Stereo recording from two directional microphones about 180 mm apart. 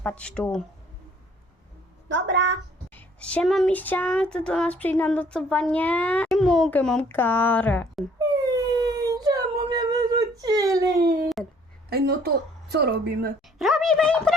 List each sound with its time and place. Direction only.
0.0 s speech: 10° left (ahead or behind)
2.3 s a sound: 80° right
2.9 s speech: 5° left (ahead or behind)
8.2 s a sound: 20° right (ahead or behind)
11.9 s a woman's voice: 60° right (ahead or behind)
13.6 s a woman's voice: centre (ahead or behind)